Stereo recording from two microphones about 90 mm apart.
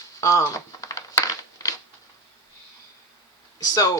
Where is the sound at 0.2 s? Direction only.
35° left (ahead or behind).